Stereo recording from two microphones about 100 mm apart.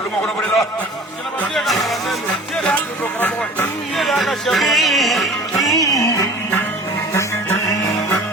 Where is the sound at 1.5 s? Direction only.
Centre (ahead or behind).